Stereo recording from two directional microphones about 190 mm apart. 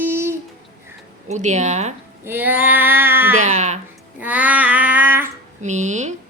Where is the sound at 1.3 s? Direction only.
40° right (ahead or behind).